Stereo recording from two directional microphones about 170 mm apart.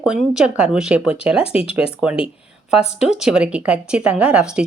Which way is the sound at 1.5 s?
35° left (ahead or behind).